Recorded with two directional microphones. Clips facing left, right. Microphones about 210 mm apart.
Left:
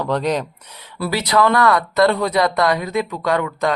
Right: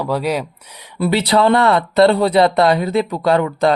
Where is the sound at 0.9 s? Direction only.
25° right (ahead or behind).